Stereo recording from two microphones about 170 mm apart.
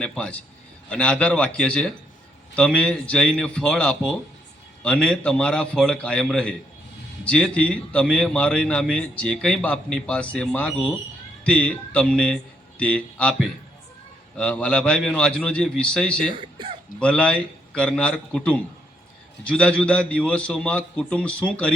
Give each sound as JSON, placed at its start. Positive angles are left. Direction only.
{"t": 0.0, "sound": "a man's voice", "side_deg": 5}
{"t": 14.3, "sound": "a man's voice", "side_deg": 5}
{"t": 16.4, "sound": "speech", "side_deg": -30}
{"t": 17.0, "sound": "a man's voice", "side_deg": 5}